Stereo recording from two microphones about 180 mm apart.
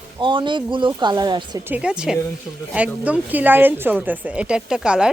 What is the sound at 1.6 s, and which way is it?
A woman's voice, 5° right (ahead or behind).